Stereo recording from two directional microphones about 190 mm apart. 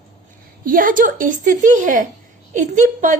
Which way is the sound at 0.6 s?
45° right (ahead or behind).